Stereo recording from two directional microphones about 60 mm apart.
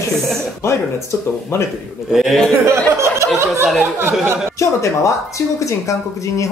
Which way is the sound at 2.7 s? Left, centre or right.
Right.